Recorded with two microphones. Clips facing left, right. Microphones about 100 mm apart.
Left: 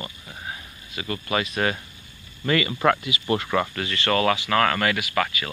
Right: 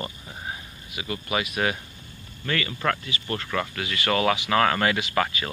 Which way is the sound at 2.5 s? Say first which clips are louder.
Left 6 dB; 10° left (ahead or behind).